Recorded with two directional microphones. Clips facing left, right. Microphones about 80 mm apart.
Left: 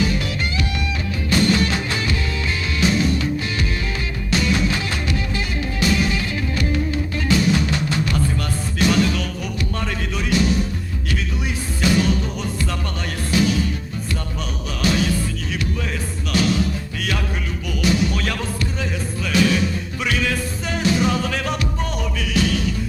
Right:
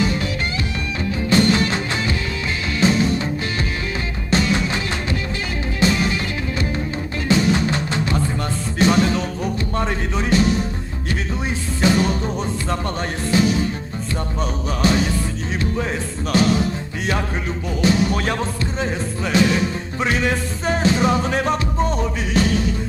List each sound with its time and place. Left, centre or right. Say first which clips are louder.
1.3 s music: right 1 dB; right
4.3 s music: right 1 dB; right
7.3 s music: right 1 dB; right
11.8 s music: right 1 dB; right
14.8 s music: right 2 dB; right
16.3 s music: right 2 dB; right